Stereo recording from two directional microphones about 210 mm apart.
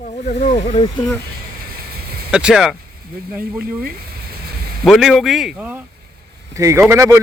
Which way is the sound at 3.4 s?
45° right (ahead or behind).